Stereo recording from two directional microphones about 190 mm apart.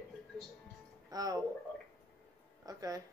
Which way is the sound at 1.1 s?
20° right (ahead or behind).